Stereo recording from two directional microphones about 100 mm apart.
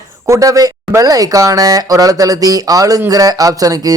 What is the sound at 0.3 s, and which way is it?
Speech, 35° right (ahead or behind).